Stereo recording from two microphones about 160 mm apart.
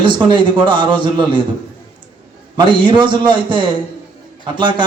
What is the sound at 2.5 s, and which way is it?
A man's voice, 30° right (ahead or behind).